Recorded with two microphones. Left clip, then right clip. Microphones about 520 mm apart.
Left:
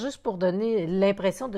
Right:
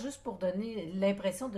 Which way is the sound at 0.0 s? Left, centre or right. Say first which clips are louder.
Left 9 dB; left.